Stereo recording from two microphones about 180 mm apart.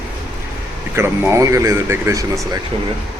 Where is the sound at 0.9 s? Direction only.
15° right (ahead or behind).